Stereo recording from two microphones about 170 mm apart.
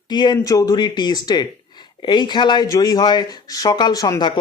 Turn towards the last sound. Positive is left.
turn(degrees=25)  # may be behind; listen again after turning